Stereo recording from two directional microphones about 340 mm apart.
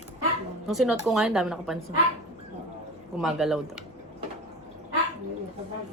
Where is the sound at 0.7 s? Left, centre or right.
Centre.